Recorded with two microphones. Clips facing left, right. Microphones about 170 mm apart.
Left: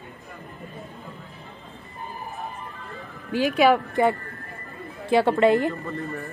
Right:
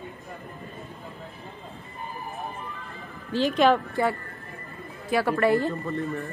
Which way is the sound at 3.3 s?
10° left (ahead or behind).